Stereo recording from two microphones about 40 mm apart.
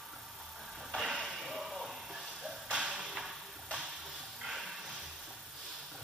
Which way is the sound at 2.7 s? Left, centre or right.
Right.